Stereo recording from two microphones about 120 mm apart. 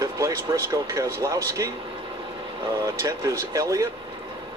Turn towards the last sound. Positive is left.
turn(degrees=-25)  # may be behind; listen again after turning